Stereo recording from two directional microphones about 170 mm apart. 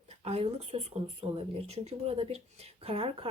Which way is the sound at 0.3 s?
40° right (ahead or behind).